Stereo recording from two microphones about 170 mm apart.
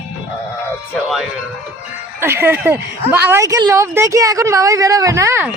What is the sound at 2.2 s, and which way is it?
A woman's voice, 15° right (ahead or behind).